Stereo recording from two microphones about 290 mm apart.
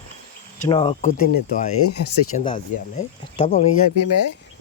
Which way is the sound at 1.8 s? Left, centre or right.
Left.